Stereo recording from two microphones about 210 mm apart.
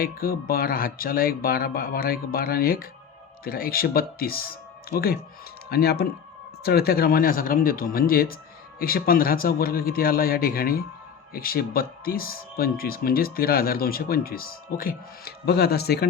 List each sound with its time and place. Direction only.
0.0 s speech: 45° left (ahead or behind)